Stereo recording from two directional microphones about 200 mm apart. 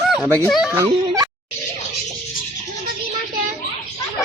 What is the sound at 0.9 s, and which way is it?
Music, 20° right (ahead or behind).